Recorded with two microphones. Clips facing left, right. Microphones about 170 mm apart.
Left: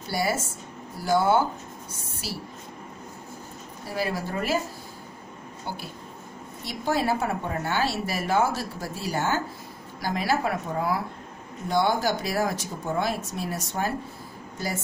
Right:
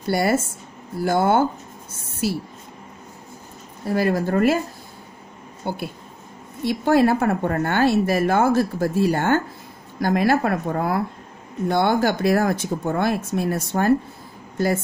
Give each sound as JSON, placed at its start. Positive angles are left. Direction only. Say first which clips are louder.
{"t": 0.0, "sound": "speech", "louder": "right 7 dB", "side_deg": -60}
{"t": 3.9, "sound": "speech", "louder": "right 9 dB", "side_deg": -55}
{"t": 5.7, "sound": "speech", "louder": "right 8 dB", "side_deg": -55}